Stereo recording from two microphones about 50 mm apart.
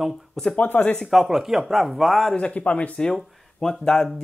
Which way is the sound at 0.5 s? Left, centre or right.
Left.